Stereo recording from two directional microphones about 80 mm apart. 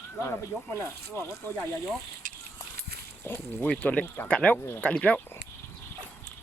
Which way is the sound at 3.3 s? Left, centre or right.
Left.